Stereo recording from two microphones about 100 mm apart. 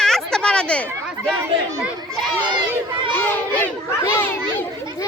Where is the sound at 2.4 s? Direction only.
50° right (ahead or behind).